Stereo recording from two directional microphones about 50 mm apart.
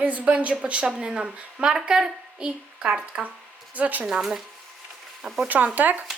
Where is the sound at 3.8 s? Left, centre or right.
Right.